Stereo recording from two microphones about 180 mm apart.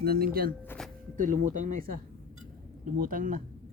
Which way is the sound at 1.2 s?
45° right (ahead or behind).